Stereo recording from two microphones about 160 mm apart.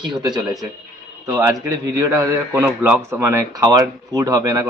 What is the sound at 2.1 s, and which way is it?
A man's voice, 20° right (ahead or behind).